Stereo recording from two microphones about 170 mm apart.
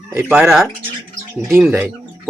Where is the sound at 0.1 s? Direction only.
10° right (ahead or behind).